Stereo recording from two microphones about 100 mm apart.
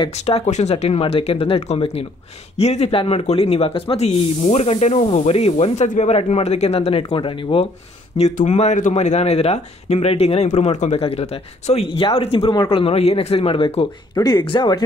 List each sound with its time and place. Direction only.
0.0 s speech: 80° left
2.5 s speech: 90° left; by 7.6 s 60° left (ahead or behind)
8.2 s speech: 90° left; by 13.8 s 75° left (ahead or behind)
14.1 s speech: 40° left (ahead or behind)